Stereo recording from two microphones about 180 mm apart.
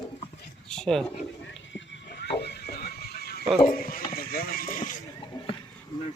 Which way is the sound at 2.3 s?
65° left (ahead or behind).